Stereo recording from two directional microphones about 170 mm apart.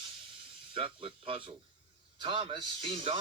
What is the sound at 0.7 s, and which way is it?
A man's voice, 30° right (ahead or behind).